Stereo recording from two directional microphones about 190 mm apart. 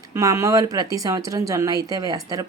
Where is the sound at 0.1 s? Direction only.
15° right (ahead or behind).